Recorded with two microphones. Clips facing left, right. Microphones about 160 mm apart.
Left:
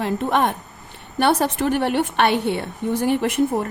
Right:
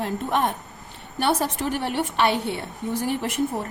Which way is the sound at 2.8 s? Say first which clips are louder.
Left 5 dB; 75° left (ahead or behind).